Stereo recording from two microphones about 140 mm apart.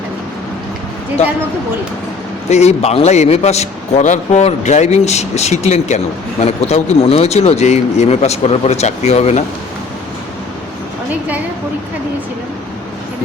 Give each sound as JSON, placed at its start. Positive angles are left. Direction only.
{"t": 2.5, "sound": "a man's voice", "side_deg": 50}